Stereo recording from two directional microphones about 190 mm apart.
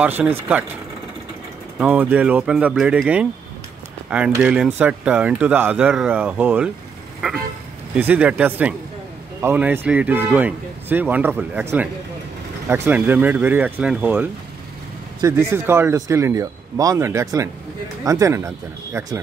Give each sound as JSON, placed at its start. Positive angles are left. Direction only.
{"t": 0.0, "sound": "speech", "side_deg": -10}
{"t": 1.8, "sound": "speech", "side_deg": -10}
{"t": 7.2, "sound": "vehicle", "side_deg": -5}
{"t": 7.9, "sound": "speech", "side_deg": -10}